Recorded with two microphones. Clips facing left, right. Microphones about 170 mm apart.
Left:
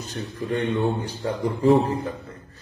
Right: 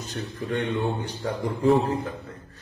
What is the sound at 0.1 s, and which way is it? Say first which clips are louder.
A man's voice: left 2 dB; centre (ahead or behind).